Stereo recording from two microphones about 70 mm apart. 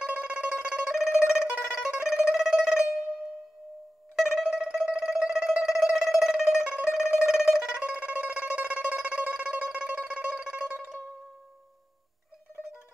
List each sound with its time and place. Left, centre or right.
0.0 s music: centre
4.2 s music: centre
5.9 s plucked string instrument: centre
6.8 s music: centre